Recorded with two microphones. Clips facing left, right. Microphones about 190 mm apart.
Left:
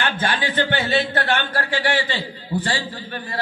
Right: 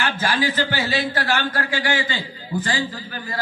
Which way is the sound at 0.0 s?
25° left (ahead or behind).